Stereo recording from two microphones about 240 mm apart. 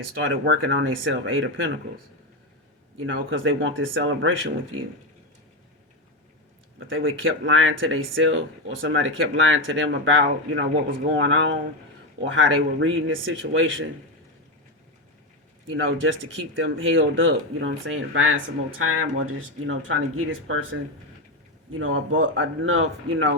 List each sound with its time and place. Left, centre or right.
0.2 s speech: right
3.0 s speech: right
6.7 s speech: right
15.7 s speech: right
21.7 s speech: right